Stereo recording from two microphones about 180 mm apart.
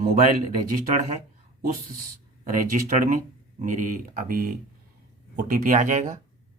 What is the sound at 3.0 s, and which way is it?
Speech, 45° right (ahead or behind).